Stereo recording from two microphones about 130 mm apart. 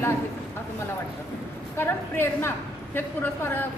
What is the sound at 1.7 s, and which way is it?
A woman's voice, 15° left (ahead or behind).